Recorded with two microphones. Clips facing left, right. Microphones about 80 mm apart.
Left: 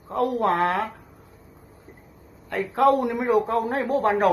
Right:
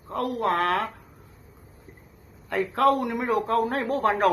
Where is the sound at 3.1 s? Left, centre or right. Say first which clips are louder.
Left 3 dB; left.